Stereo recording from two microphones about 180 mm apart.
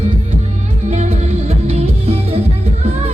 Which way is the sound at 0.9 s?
40° right (ahead or behind).